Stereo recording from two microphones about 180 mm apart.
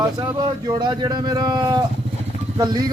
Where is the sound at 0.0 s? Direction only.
20° right (ahead or behind).